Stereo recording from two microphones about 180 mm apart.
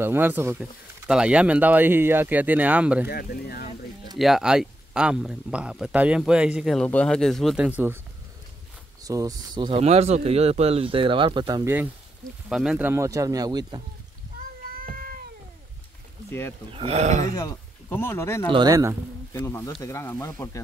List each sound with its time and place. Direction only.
0.0 s speech: 10° right (ahead or behind)
3.1 s speech: 60° left (ahead or behind)
4.2 s speech: 5° right (ahead or behind)
9.0 s speech: 20° right (ahead or behind)
12.4 s speech: 5° right (ahead or behind); by 13.8 s 25° right (ahead or behind)
14.8 s cat: 55° right (ahead or behind)
16.3 s speech: 15° left (ahead or behind)
16.7 s speech: 35° right (ahead or behind)
17.4 s speech: 10° left (ahead or behind)
18.5 s speech: 20° right (ahead or behind)
19.3 s speech: 15° left (ahead or behind)